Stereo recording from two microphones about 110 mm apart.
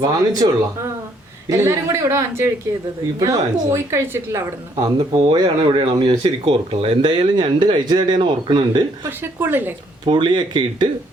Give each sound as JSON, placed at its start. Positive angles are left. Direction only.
{"t": 0.0, "sound": "speech", "side_deg": -35}
{"t": 1.5, "sound": "a woman's voice", "side_deg": -25}
{"t": 4.8, "sound": "speech", "side_deg": -35}
{"t": 6.4, "sound": "speech", "side_deg": -60}
{"t": 9.0, "sound": "a woman's voice", "side_deg": -20}
{"t": 10.1, "sound": "speech", "side_deg": -45}